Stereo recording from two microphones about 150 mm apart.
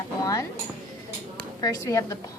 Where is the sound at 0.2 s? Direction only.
25° left (ahead or behind).